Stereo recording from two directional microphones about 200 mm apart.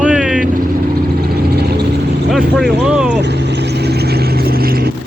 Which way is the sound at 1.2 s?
50° right (ahead or behind).